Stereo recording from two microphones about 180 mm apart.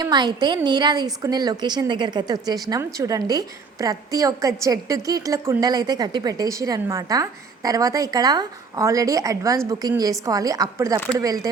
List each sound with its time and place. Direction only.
0.0 s a woman's voice: 20° right (ahead or behind)